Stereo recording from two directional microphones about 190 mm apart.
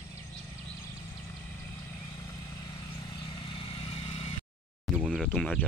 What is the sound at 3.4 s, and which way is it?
Vehicle, 30° left (ahead or behind).